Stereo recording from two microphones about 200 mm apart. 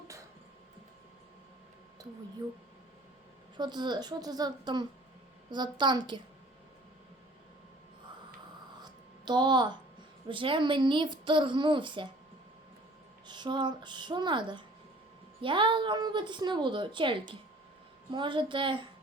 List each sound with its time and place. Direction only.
2.0 s speech: 15° right (ahead or behind)
3.6 s a woman's voice: 20° right (ahead or behind)
8.8 s a sound: 20° right (ahead or behind)
10.2 s a woman's voice: 25° right (ahead or behind)
13.2 s a woman's voice: 20° right (ahead or behind)